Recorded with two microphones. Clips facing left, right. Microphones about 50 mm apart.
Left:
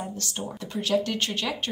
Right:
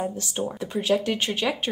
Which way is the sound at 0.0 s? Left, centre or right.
Centre.